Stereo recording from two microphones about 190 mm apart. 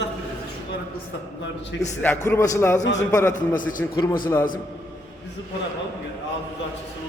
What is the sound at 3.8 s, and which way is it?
Speech, 10° left (ahead or behind).